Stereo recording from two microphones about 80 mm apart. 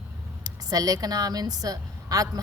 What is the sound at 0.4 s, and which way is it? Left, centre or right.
Speech, right.